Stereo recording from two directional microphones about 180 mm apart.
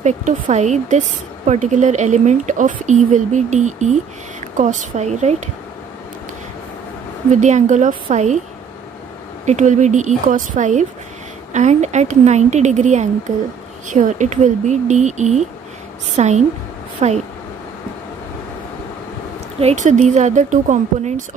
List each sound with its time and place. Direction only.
0.0 s speech: 40° right (ahead or behind)
7.2 s speech: 40° right (ahead or behind)
9.5 s speech: 40° right (ahead or behind)
19.6 s speech: 40° right (ahead or behind)